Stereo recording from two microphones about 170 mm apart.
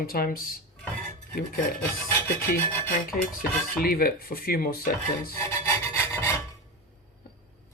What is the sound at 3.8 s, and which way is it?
Speech, 60° left (ahead or behind).